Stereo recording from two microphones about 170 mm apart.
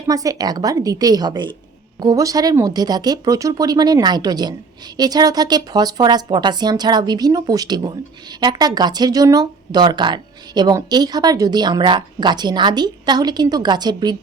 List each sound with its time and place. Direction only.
0.1 s speech: 20° right (ahead or behind)